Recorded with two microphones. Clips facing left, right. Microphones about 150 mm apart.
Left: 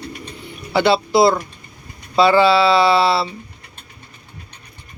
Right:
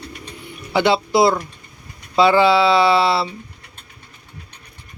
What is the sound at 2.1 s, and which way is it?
Music, 15° right (ahead or behind).